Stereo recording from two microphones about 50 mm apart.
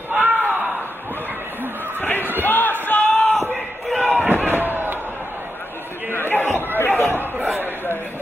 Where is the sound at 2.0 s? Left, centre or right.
Left.